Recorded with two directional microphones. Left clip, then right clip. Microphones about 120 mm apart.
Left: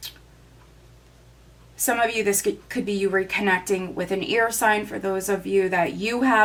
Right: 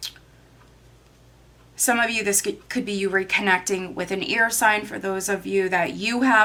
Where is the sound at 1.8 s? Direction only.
15° right (ahead or behind).